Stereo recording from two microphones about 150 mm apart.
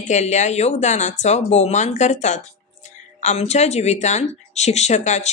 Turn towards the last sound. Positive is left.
turn(degrees=50)  # may be behind; listen again after turning